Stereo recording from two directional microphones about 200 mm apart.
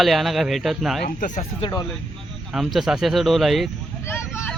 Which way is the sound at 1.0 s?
45° left (ahead or behind).